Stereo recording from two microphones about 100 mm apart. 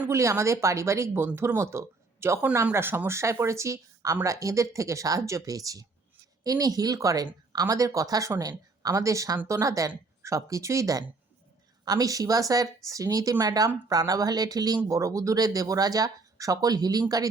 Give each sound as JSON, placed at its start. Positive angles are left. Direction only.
{"t": 0.1, "sound": "speech", "side_deg": -30}